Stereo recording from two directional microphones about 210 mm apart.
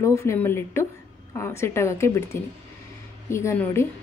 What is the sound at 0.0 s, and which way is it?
A woman's voice, 15° left (ahead or behind).